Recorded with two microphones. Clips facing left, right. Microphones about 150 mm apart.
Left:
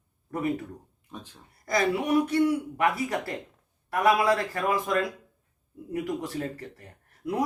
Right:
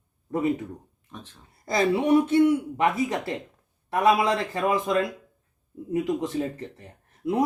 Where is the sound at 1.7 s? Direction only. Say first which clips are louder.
Right 4 dB; 25° right (ahead or behind).